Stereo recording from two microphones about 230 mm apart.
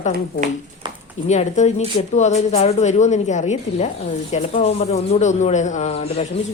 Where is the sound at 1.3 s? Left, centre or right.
Left.